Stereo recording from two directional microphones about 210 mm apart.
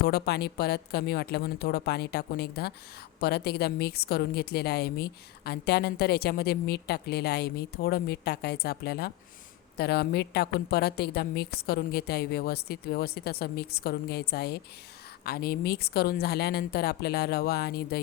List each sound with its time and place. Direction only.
0.0 s a woman's voice: 50° left (ahead or behind)